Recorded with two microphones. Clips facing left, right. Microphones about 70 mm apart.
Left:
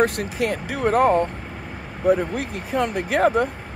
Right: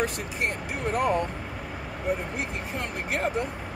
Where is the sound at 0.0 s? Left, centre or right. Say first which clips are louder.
Left 8 dB; left.